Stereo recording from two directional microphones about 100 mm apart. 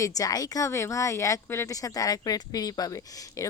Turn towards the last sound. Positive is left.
turn(degrees=35)  # may be behind; listen again after turning